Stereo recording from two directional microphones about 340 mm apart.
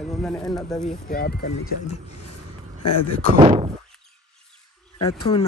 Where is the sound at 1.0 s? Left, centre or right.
Left.